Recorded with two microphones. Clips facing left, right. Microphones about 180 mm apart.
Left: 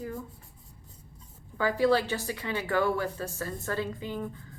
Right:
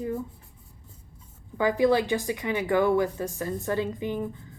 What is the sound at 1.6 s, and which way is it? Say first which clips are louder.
A woman's voice: right 3 dB; 20° right (ahead or behind).